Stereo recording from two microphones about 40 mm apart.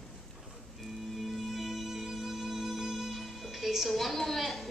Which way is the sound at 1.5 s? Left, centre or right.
Centre.